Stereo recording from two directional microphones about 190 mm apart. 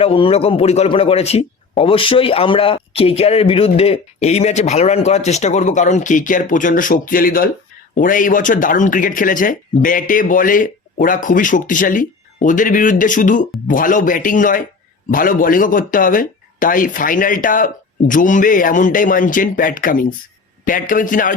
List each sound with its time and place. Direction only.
0.0 s speech: 30° left (ahead or behind)